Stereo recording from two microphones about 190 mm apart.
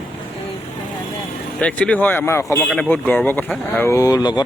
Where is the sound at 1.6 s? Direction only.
5° left (ahead or behind).